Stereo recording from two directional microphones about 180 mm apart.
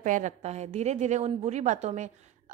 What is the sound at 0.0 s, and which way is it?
A woman's voice, 45° right (ahead or behind).